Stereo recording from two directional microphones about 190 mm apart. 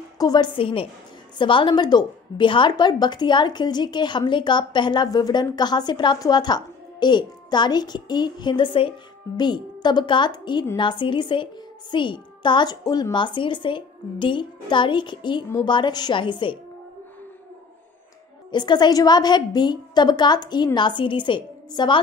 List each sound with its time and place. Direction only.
0.2 s a woman's voice: 20° left (ahead or behind)
18.5 s a woman's voice: 25° left (ahead or behind)